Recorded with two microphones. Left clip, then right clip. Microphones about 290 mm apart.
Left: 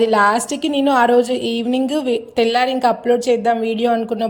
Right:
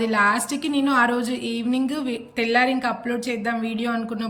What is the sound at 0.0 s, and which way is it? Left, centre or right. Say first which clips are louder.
A woman's voice: left 6 dB; centre.